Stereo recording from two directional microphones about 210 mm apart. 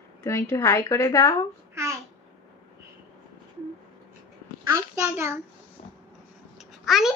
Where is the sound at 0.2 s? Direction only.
15° left (ahead or behind).